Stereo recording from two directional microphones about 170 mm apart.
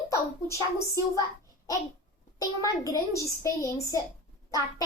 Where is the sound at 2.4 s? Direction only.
20° left (ahead or behind).